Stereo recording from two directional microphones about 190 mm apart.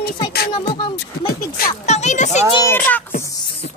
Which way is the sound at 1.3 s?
50° left (ahead or behind).